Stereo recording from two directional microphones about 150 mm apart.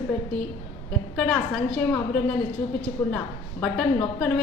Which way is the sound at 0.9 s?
10° left (ahead or behind).